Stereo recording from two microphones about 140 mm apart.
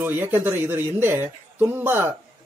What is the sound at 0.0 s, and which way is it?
Speech, 15° right (ahead or behind).